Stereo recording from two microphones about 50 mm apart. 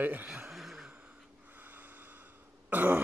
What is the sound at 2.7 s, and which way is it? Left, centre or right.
Throat clearing, right.